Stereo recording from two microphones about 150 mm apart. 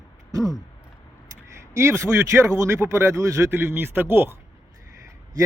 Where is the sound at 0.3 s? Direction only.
25° right (ahead or behind).